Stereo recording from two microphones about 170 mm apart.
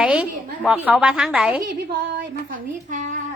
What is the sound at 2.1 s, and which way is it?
Speech, 50° right (ahead or behind).